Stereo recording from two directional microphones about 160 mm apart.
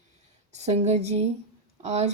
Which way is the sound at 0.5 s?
45° right (ahead or behind).